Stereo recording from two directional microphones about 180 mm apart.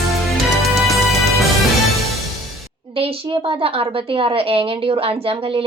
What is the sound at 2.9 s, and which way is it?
A woman's voice, 30° right (ahead or behind).